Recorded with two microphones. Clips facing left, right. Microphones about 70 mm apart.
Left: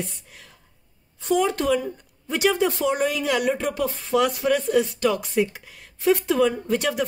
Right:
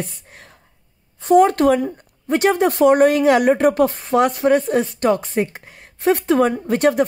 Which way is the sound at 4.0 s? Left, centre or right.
Right.